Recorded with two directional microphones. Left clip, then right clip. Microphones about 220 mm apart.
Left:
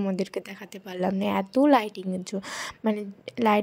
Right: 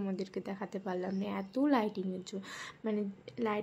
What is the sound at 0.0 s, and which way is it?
A woman's voice, 35° left (ahead or behind).